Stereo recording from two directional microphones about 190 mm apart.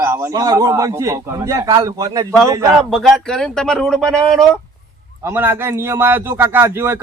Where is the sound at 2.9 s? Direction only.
Centre (ahead or behind).